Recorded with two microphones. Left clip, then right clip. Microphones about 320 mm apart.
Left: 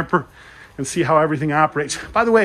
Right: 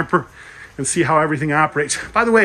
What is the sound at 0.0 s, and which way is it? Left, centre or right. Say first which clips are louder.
Speech: right 1 dB; centre.